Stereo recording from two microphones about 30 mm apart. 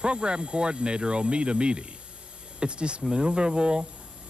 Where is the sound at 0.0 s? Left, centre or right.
Right.